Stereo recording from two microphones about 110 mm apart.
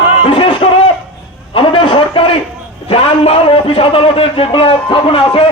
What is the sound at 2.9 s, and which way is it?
A man's voice, 60° left (ahead or behind).